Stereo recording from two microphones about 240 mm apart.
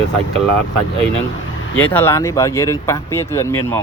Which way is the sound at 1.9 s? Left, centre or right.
Centre.